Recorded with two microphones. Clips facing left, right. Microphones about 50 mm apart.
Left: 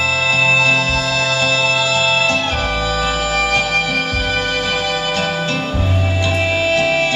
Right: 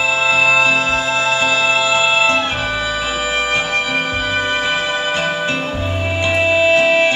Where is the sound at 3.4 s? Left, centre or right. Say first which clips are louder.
Left 2 dB; right.